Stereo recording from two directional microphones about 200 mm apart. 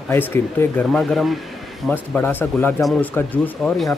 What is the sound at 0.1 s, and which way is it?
Speech, 10° left (ahead or behind).